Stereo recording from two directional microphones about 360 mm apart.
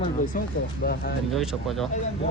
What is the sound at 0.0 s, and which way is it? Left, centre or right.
Speech, left.